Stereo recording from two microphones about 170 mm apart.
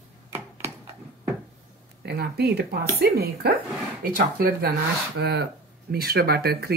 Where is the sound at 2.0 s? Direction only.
70° right (ahead or behind).